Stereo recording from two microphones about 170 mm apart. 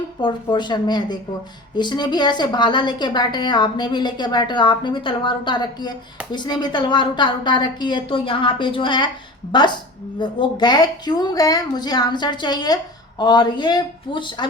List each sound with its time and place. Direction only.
0.2 s a woman's voice: 25° left (ahead or behind)